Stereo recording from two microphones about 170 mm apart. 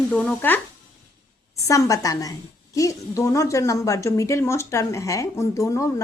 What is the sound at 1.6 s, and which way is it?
A woman's voice, 20° left (ahead or behind).